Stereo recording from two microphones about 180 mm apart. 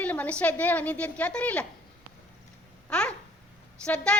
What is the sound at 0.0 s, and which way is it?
A woman's voice, 10° left (ahead or behind).